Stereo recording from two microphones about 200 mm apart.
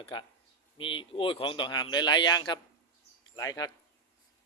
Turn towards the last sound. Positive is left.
turn(degrees=20)  # may be behind; listen again after turning